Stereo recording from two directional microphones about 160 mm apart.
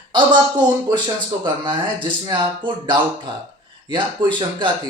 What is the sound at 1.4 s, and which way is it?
Speech, 30° right (ahead or behind).